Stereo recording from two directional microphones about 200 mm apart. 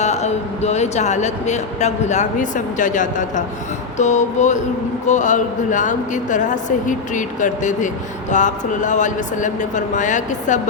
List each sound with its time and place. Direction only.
0.0 s a man's voice: 35° left (ahead or behind)